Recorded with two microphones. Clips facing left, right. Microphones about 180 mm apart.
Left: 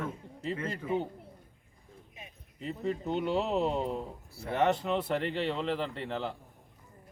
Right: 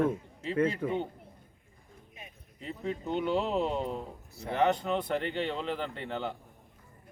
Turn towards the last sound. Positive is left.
turn(degrees=0)  # may be behind; listen again after turning